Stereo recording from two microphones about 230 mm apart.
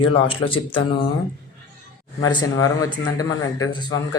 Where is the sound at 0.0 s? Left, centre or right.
Left.